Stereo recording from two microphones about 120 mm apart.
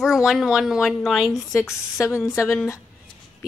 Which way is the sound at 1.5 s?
25° left (ahead or behind).